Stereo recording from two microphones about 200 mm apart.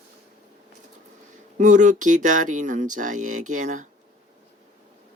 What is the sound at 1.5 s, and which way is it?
Speech, 40° right (ahead or behind).